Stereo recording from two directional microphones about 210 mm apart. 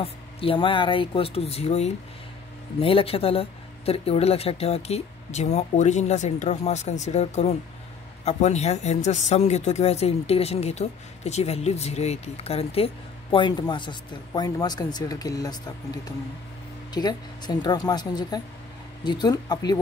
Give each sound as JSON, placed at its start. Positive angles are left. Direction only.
{"t": 0.0, "sound": "speech", "side_deg": 25}